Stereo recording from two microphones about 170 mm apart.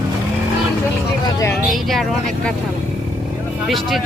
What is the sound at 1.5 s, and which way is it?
Speech, centre (ahead or behind).